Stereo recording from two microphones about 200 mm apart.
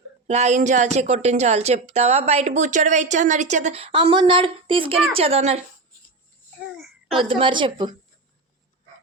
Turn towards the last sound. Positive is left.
turn(degrees=-25)  # may be behind; listen again after turning